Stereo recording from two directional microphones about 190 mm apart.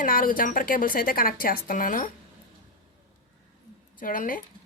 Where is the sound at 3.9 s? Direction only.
45° left (ahead or behind).